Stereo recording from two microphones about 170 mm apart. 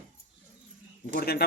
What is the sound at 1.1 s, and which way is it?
Speech, 60° left (ahead or behind).